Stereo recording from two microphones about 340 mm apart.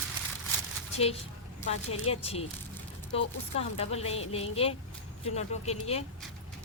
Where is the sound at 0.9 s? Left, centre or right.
Centre.